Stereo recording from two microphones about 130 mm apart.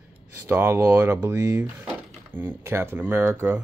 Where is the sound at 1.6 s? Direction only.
10° right (ahead or behind).